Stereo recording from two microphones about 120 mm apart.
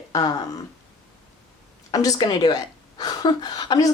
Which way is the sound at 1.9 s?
30° left (ahead or behind).